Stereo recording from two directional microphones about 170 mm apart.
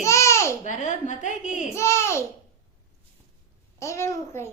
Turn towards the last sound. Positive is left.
turn(degrees=15)  # may be behind; listen again after turning